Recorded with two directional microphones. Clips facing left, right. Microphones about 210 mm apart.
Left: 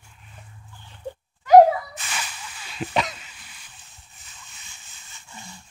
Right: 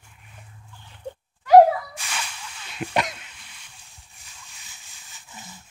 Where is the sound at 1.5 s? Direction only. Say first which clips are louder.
Even; centre (ahead or behind).